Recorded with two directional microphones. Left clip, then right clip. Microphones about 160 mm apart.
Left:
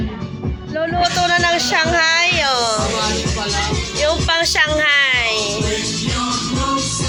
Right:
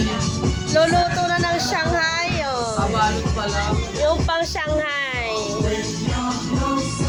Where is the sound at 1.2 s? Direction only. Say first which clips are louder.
Left 5 dB; centre (ahead or behind).